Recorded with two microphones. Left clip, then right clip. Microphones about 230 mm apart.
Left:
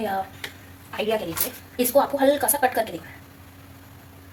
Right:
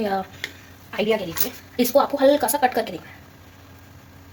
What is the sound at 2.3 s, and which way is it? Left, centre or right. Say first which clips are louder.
Speech: right 2 dB; right.